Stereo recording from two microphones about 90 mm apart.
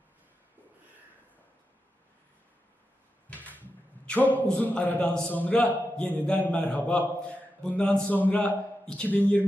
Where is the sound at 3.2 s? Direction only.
20° left (ahead or behind).